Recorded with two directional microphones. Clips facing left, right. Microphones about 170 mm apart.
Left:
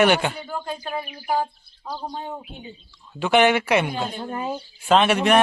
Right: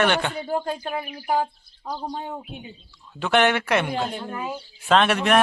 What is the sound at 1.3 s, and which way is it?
Speech, 20° right (ahead or behind).